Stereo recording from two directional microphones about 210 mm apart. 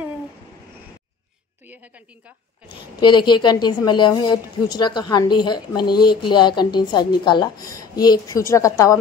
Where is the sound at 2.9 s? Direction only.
20° left (ahead or behind).